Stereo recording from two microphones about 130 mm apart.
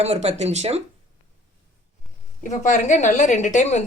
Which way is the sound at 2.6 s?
70° left (ahead or behind).